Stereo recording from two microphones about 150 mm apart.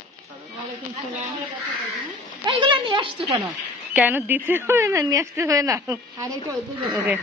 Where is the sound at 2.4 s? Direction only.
30° right (ahead or behind).